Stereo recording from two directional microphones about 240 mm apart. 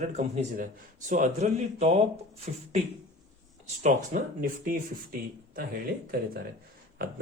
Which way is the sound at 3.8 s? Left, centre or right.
Right.